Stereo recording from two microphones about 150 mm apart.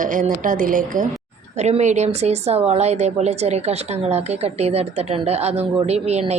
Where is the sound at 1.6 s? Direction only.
50° right (ahead or behind).